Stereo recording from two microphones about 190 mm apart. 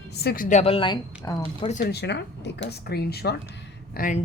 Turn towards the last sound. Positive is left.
turn(degrees=45)  # may be behind; listen again after turning